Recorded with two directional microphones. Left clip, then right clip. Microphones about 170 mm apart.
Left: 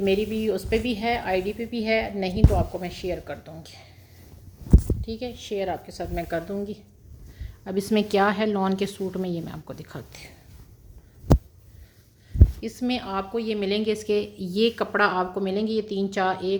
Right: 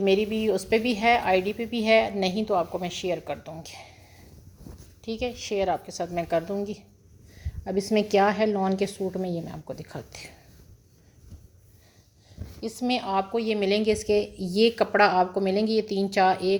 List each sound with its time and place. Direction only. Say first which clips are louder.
0.0 s a woman's voice: right 1 dB; 15° right (ahead or behind)
5.0 s a woman's voice: right 2 dB; 20° right (ahead or behind)
7.6 s a woman's voice: even; 5° left (ahead or behind)
12.5 s a woman's voice: right 3 dB; centre (ahead or behind); by 16.6 s 20° right (ahead or behind)